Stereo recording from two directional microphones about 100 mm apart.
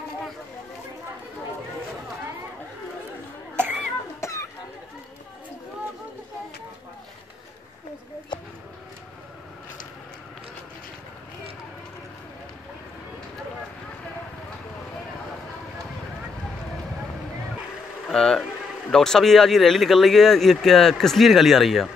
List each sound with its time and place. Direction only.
3.5 s cough: 20° right (ahead or behind)
4.2 s a sound: 30° left (ahead or behind)
18.0 s speech: 5° left (ahead or behind)